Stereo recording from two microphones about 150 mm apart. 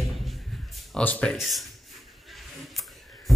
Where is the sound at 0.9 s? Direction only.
10° left (ahead or behind).